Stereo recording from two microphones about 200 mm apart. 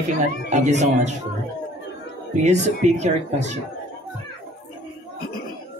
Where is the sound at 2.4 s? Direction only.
35° right (ahead or behind).